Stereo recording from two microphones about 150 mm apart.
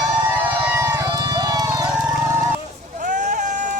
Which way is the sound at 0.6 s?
15° right (ahead or behind).